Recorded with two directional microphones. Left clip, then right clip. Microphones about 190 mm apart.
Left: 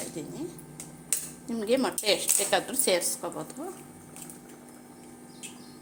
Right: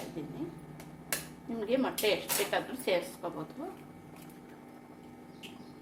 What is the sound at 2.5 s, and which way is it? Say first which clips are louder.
A woman's voice: left 7 dB; 50° left (ahead or behind).